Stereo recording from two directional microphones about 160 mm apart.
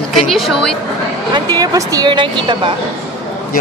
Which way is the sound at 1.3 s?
25° right (ahead or behind).